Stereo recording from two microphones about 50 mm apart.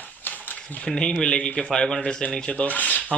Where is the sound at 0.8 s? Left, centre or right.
Centre.